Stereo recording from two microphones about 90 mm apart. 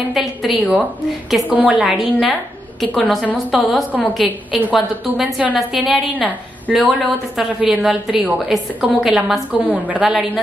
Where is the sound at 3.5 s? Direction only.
Centre (ahead or behind).